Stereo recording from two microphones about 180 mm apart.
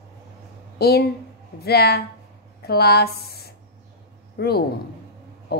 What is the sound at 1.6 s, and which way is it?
A man's voice, 60° left (ahead or behind).